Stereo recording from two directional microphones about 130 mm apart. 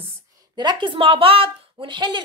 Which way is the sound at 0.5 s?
35° right (ahead or behind).